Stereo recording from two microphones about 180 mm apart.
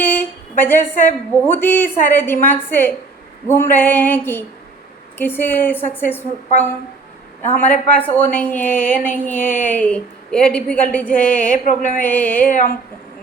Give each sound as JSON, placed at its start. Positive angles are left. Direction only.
{"t": 0.6, "sound": "a woman's voice", "side_deg": 10}
{"t": 11.5, "sound": "a sound", "side_deg": 45}
{"t": 11.8, "sound": "a woman's voice", "side_deg": 10}